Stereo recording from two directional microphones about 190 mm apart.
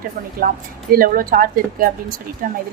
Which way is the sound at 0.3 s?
50° right (ahead or behind).